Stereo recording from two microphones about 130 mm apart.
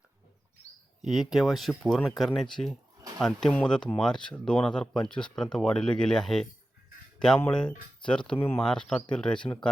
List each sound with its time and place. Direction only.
1.0 s speech: centre (ahead or behind)
7.5 s speech: 5° left (ahead or behind)
8.4 s speech: 15° left (ahead or behind)
8.6 s speech: 5° left (ahead or behind)